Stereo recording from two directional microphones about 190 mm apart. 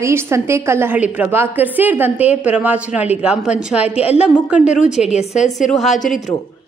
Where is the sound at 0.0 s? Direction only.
15° right (ahead or behind).